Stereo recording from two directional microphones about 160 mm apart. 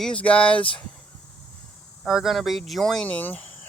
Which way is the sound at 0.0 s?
10° left (ahead or behind).